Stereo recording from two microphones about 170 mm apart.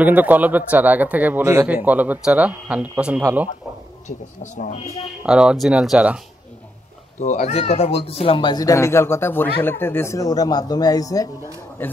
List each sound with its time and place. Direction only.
0.0 s speech: 10° right (ahead or behind)
4.4 s speech: 45° left (ahead or behind)
5.2 s speech: 5° right (ahead or behind)
7.2 s speech: 45° left (ahead or behind); by 11.9 s 10° left (ahead or behind)